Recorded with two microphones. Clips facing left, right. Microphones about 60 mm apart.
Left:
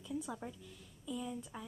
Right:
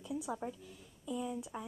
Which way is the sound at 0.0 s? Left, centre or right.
Centre.